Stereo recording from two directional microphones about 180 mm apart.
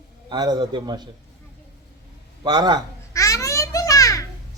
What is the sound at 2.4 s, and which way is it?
Speech, 25° right (ahead or behind).